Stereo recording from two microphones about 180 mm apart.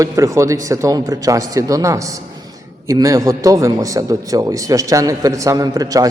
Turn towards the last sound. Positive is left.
turn(degrees=-20)  # may be behind; listen again after turning